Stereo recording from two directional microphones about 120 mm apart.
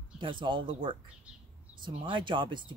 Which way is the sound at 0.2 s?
45° right (ahead or behind).